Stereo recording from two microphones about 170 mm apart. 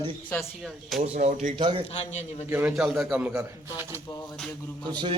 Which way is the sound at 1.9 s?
40° left (ahead or behind).